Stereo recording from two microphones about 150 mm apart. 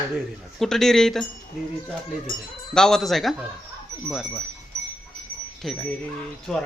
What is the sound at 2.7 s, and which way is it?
Speech, 5° left (ahead or behind).